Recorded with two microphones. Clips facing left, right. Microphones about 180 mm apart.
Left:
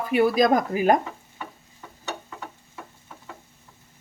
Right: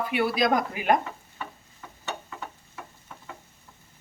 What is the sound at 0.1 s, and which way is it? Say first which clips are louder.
Speech: left 6 dB; 40° left (ahead or behind).